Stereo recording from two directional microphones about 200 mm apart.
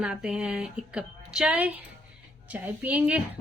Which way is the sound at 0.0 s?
5° right (ahead or behind).